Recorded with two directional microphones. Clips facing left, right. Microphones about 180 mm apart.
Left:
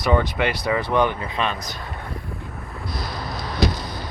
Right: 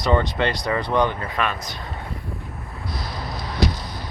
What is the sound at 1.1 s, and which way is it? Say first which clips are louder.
Speech: even; 20° left (ahead or behind).